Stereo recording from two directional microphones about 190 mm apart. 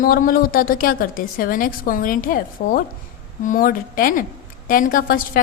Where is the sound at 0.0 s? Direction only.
50° left (ahead or behind).